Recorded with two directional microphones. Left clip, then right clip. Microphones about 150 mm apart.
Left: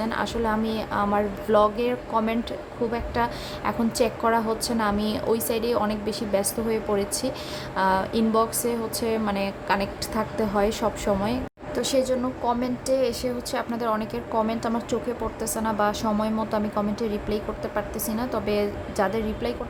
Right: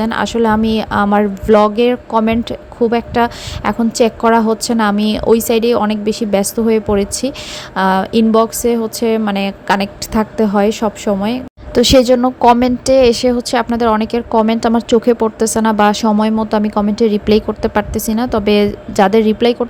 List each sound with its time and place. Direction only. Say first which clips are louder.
0.0 s a woman's voice: right 11 dB; 50° right (ahead or behind)
11.8 s a woman's voice: right 14 dB; 60° right (ahead or behind)